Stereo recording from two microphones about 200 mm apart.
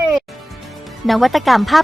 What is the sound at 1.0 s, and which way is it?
Speech, centre (ahead or behind).